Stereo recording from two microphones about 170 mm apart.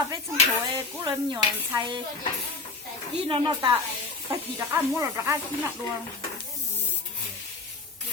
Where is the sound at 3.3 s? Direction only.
25° right (ahead or behind).